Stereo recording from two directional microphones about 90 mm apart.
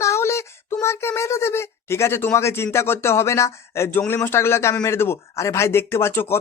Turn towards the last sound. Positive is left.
turn(degrees=25)  # may be behind; listen again after turning